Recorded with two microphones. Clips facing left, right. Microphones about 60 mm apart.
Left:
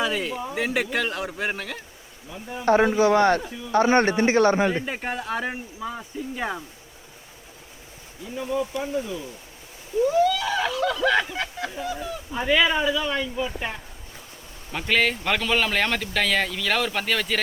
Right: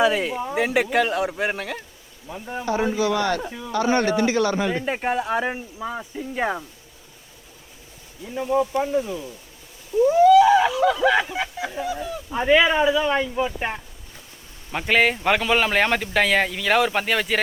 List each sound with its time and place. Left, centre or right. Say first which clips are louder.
0.0 s speech: right 5 dB; centre
2.3 s speech: right 4 dB; right
2.6 s a man's voice: left 4 dB; left
4.9 s speech: right 5 dB; centre
8.4 s speech: right 5 dB; right